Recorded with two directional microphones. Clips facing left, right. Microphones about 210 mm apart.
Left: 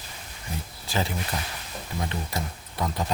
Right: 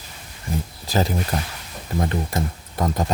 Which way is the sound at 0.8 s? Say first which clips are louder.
Right 6 dB; 40° right (ahead or behind).